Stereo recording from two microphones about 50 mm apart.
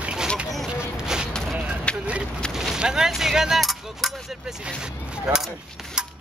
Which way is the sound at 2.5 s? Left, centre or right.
Centre.